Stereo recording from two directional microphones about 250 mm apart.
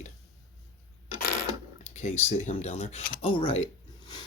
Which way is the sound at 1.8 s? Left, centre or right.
Left.